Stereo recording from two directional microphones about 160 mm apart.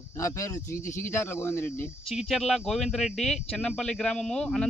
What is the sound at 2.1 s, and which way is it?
Speech, centre (ahead or behind).